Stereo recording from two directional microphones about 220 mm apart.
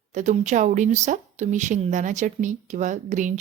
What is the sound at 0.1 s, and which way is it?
A woman's voice, 35° right (ahead or behind).